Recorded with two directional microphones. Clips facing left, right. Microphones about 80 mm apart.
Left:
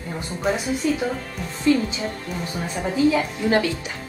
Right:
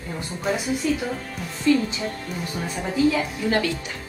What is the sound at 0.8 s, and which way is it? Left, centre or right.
Speech, left.